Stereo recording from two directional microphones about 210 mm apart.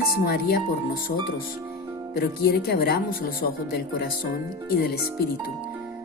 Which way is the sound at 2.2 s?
50° left (ahead or behind).